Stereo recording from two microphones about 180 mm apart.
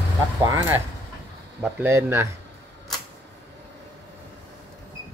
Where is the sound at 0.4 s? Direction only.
15° right (ahead or behind).